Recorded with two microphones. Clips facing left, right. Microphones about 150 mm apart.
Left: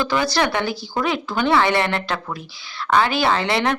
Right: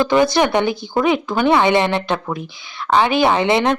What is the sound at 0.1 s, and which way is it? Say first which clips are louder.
Speech: right 6 dB; 20° right (ahead or behind).